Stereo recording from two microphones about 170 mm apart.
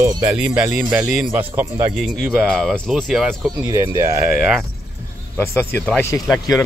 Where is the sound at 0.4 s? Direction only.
5° right (ahead or behind).